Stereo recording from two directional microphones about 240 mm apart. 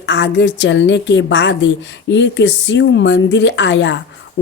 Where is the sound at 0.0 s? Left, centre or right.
Left.